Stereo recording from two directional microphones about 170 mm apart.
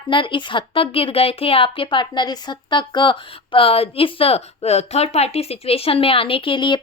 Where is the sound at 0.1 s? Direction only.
30° left (ahead or behind).